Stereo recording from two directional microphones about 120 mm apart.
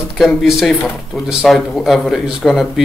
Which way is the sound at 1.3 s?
5° right (ahead or behind).